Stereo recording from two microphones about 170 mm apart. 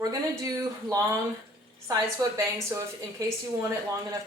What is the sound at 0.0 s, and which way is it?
A woman's voice, 20° right (ahead or behind).